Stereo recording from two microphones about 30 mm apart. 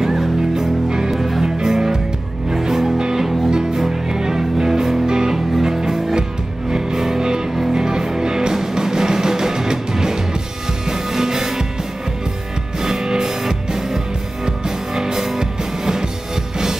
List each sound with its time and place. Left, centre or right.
0.0 s music: centre
1.1 s music: centre
1.4 s music: centre
3.4 s music: right
12.8 s music: centre
15.0 s music: centre